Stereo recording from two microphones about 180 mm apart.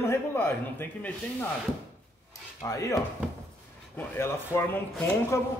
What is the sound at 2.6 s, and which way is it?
A man's voice, 15° left (ahead or behind).